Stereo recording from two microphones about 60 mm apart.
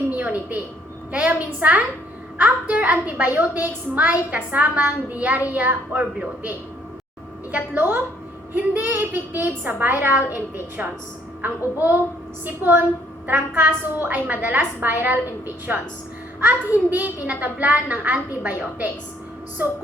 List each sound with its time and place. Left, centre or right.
0.1 s a sound: right
1.1 s a woman's voice: right
7.5 s a woman's voice: right
16.9 s a woman's voice: right